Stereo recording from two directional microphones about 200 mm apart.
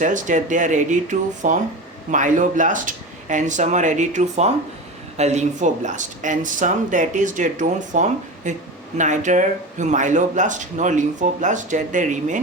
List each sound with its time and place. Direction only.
0.0 s speech: 40° right (ahead or behind)